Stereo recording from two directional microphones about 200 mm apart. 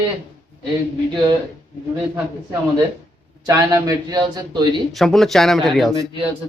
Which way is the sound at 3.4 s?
15° right (ahead or behind).